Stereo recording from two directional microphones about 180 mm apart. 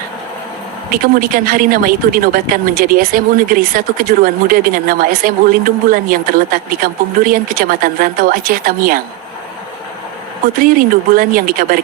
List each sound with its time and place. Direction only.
0.9 s a woman's voice: 55° right (ahead or behind)
10.6 s a woman's voice: 50° right (ahead or behind)